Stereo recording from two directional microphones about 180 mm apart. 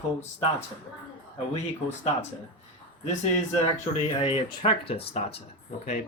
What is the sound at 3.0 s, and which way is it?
Speech, 40° left (ahead or behind).